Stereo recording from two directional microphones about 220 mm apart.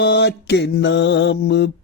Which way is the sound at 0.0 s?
50° left (ahead or behind).